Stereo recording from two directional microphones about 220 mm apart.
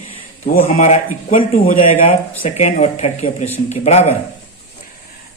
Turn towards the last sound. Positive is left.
turn(degrees=30)  # may be behind; listen again after turning